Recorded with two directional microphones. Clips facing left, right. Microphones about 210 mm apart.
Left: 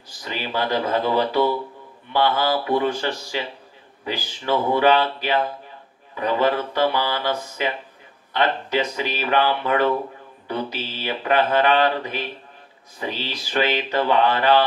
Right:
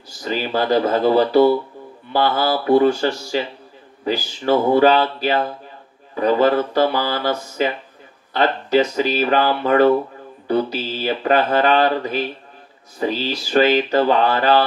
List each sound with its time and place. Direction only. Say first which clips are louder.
0.2 s mantra: right 5 dB; 40° right (ahead or behind)